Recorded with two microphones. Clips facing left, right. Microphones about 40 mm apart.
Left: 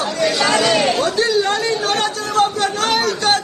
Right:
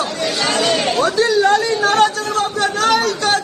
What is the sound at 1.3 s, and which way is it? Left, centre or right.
Chatter, right.